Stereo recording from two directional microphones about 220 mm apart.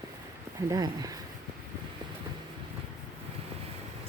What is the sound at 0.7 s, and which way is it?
Speech, 15° right (ahead or behind).